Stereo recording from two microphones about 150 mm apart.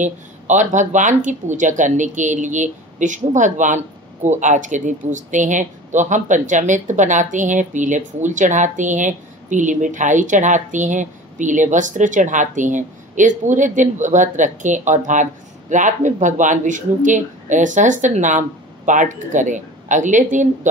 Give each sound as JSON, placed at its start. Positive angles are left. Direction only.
{"t": 0.0, "sound": "speech", "side_deg": -55}